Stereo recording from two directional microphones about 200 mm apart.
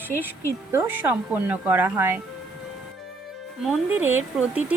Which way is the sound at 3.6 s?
Centre (ahead or behind).